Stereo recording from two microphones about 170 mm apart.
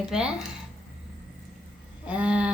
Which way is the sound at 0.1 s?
5° right (ahead or behind).